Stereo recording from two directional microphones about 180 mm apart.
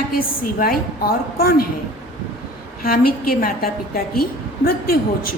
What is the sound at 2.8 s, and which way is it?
A woman's voice, 55° left (ahead or behind).